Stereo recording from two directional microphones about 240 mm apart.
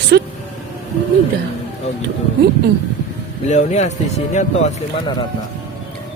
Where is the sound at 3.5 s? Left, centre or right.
Left.